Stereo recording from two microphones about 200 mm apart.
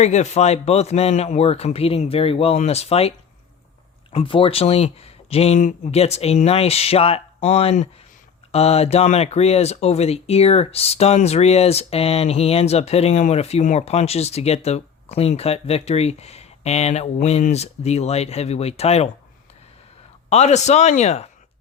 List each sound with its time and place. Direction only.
0.0 s speech: 35° left (ahead or behind)
20.3 s speech: 35° left (ahead or behind)